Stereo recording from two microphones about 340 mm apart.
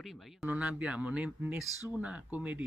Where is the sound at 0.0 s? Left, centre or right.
Centre.